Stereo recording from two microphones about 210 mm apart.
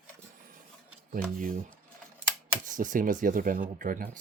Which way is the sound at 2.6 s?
40° right (ahead or behind).